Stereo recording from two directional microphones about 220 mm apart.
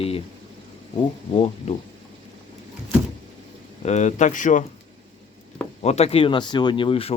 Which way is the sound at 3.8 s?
30° left (ahead or behind).